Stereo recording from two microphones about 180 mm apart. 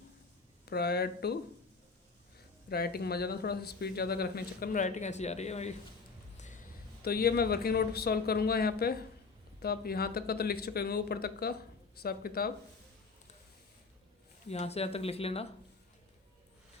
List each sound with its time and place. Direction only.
0.6 s speech: 65° left (ahead or behind)
2.6 s speech: 60° left (ahead or behind); by 5.7 s 40° left (ahead or behind)
6.3 s a sound: 40° left (ahead or behind)
7.0 s speech: 60° left (ahead or behind)
14.5 s speech: 35° left (ahead or behind)